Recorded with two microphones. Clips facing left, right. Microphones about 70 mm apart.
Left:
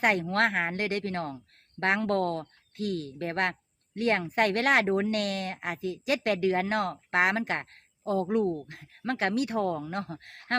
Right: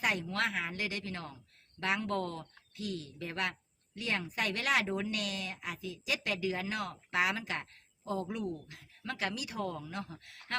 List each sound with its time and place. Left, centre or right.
0.0 s speech: left